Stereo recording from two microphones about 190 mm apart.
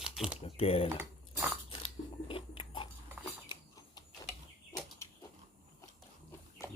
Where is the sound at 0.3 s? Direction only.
30° left (ahead or behind).